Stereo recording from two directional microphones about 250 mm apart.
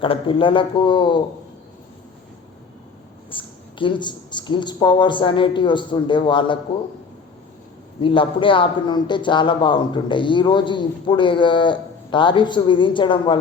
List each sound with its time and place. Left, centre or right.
0.0 s speech: left
3.2 s speech: centre
8.0 s speech: left